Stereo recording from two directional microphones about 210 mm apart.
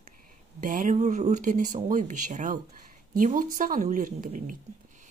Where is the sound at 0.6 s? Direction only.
40° right (ahead or behind).